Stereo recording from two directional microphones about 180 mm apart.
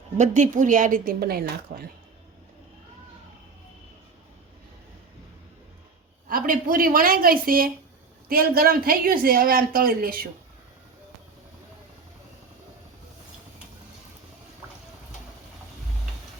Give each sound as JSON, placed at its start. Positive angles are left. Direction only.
{"t": 0.2, "sound": "speech", "side_deg": -40}
{"t": 6.2, "sound": "speech", "side_deg": -50}